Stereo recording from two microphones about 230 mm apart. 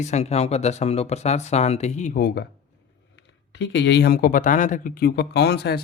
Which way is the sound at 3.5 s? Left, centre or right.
Left.